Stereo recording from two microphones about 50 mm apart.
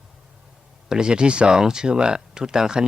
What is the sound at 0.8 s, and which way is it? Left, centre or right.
Speech, centre.